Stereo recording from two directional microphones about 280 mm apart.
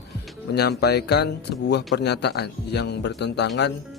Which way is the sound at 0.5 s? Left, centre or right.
Left.